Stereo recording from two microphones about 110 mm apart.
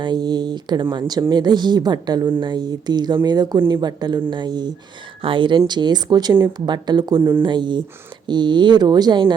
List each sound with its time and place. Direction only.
0.0 s speech: 40° right (ahead or behind)
7.2 s speech: 20° right (ahead or behind)
7.4 s speech: 45° right (ahead or behind)